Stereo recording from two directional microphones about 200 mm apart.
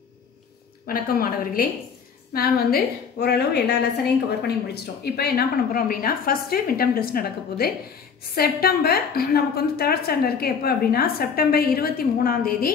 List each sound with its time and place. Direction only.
0.8 s a woman's voice: 45° left (ahead or behind)